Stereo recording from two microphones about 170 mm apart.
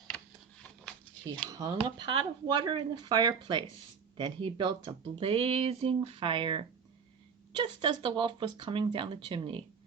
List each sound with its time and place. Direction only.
1.5 s speech: 20° right (ahead or behind)